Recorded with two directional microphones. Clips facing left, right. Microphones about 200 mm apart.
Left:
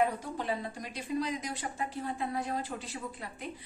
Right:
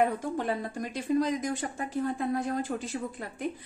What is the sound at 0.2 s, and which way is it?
A woman's voice, 50° right (ahead or behind).